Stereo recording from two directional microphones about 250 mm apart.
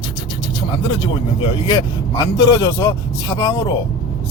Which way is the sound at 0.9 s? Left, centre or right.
Centre.